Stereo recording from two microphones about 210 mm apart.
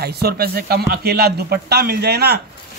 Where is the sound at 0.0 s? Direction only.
50° right (ahead or behind).